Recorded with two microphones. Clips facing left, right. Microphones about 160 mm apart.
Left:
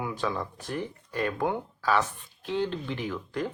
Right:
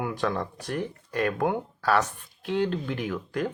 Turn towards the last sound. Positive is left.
turn(degrees=-50)  # may be behind; listen again after turning